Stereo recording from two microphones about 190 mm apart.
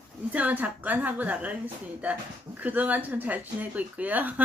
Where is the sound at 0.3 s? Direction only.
10° right (ahead or behind).